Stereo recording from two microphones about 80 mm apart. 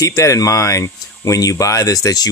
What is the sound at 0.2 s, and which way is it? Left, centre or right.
Speech, left.